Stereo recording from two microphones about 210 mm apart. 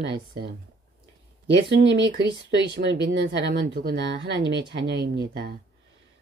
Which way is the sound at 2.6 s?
55° right (ahead or behind).